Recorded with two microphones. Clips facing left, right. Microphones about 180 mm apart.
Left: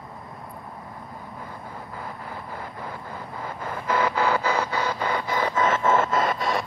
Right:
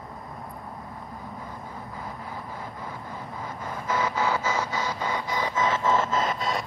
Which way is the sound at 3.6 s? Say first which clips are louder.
Left 4 dB; 60° left (ahead or behind).